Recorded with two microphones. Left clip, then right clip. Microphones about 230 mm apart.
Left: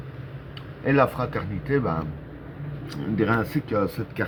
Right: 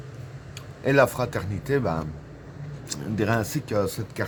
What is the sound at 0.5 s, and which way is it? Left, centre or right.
A man's voice, right.